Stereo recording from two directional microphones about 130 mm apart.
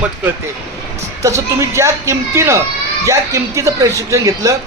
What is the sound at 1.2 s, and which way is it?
A woman's voice, 25° right (ahead or behind).